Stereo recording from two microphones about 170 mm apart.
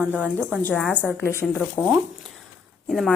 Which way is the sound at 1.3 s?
15° left (ahead or behind).